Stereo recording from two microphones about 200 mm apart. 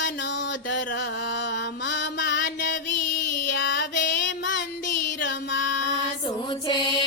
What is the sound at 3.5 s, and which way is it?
Music, 60° left (ahead or behind).